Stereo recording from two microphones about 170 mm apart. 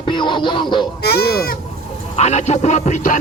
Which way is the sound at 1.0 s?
70° left (ahead or behind).